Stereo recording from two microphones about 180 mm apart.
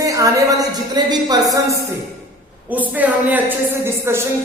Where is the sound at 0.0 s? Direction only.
20° right (ahead or behind).